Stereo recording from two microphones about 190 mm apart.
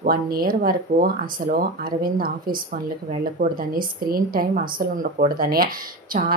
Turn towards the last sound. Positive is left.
turn(degrees=-50)  # may be behind; listen again after turning